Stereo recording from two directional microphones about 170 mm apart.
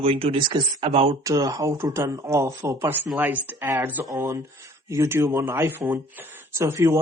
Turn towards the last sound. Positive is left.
turn(degrees=-15)  # may be behind; listen again after turning